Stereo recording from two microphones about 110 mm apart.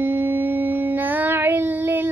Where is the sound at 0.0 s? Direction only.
20° right (ahead or behind).